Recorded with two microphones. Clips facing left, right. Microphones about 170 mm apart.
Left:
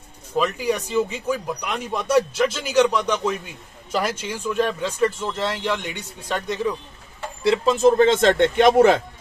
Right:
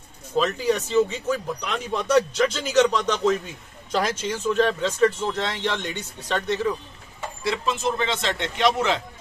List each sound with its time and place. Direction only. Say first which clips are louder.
0.4 s a man's voice: even; 10° left (ahead or behind)
7.4 s speech: left 9 dB; 35° left (ahead or behind); by 9.0 s 50° left (ahead or behind)